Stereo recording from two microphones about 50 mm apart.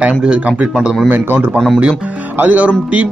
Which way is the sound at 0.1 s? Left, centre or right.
Centre.